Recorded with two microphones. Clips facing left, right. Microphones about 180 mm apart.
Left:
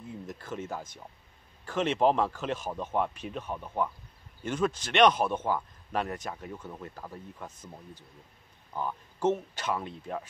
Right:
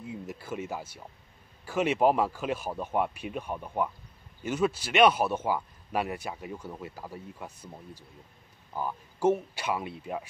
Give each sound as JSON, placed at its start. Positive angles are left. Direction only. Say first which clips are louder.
{"t": 0.0, "sound": "speech", "louder": "right 2 dB", "side_deg": -10}